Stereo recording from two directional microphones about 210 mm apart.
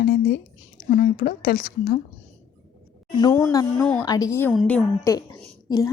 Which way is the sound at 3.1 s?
15° left (ahead or behind).